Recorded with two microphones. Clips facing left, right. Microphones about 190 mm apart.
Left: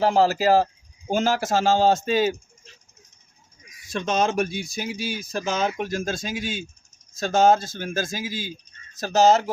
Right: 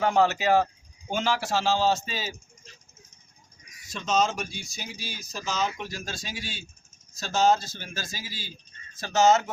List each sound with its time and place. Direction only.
0.0 s speech: 35° left (ahead or behind); by 2.3 s 55° left (ahead or behind)
3.8 s speech: 55° left (ahead or behind)
9.0 s speech: 40° left (ahead or behind)